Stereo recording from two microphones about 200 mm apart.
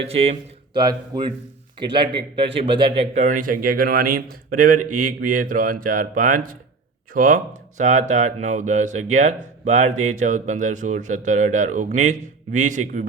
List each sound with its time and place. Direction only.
0.0 s speech: 30° right (ahead or behind)